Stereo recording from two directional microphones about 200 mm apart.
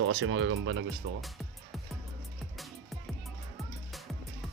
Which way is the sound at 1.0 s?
55° right (ahead or behind).